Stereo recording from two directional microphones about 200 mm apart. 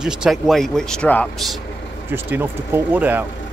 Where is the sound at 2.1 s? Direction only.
10° right (ahead or behind).